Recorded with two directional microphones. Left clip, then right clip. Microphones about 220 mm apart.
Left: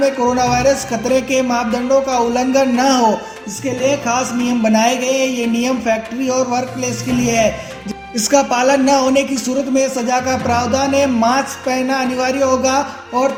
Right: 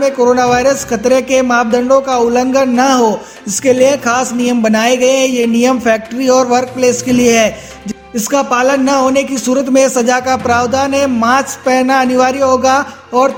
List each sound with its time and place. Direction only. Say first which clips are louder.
0.0 s speech: right 5 dB; 40° right (ahead or behind)
3.6 s speech: right 8 dB; 50° right (ahead or behind)
8.1 s speech: right 1 dB; 20° right (ahead or behind)
9.7 s speech: right 6 dB; 45° right (ahead or behind)